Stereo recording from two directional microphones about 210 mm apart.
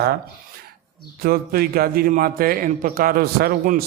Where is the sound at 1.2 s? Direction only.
45° right (ahead or behind).